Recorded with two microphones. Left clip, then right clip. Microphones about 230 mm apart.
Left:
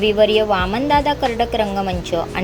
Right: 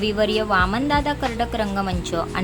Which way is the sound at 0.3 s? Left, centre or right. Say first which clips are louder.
Left 3 dB; centre.